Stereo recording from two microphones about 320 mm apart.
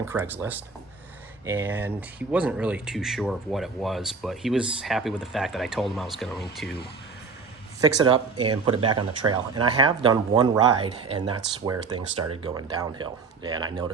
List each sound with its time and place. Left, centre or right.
0.0 s speech: centre
7.8 s speech: centre
8.6 s speech: right
9.2 s speech: centre